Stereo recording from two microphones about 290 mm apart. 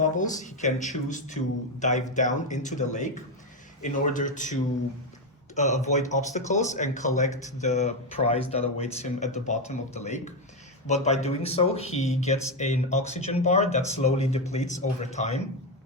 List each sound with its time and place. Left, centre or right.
0.0 s speech: left
5.5 s speech: left